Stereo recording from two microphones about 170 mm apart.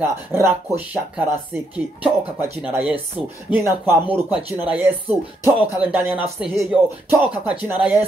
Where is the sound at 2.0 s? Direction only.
10° right (ahead or behind).